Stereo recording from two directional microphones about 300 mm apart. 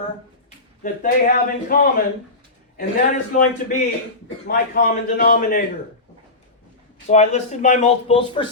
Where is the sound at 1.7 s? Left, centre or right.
Left.